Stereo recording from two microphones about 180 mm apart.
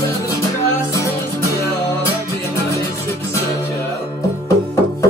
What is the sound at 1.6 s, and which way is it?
Music, 15° left (ahead or behind).